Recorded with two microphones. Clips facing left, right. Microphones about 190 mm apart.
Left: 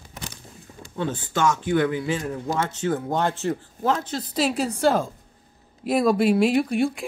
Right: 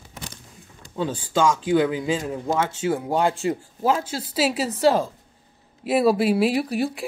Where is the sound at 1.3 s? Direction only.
15° right (ahead or behind).